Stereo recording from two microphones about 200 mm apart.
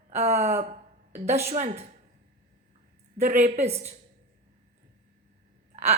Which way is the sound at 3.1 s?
40° right (ahead or behind).